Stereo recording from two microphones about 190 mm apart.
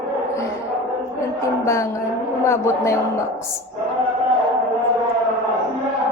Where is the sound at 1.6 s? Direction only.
15° left (ahead or behind).